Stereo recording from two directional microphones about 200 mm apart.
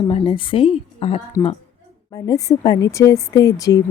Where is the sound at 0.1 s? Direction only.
25° left (ahead or behind).